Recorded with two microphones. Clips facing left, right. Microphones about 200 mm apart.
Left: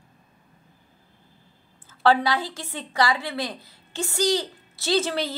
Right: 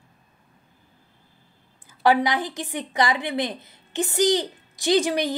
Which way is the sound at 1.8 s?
15° right (ahead or behind).